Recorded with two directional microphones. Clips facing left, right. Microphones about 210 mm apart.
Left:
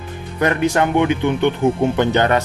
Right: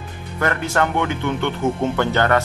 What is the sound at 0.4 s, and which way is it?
Speech, 15° left (ahead or behind).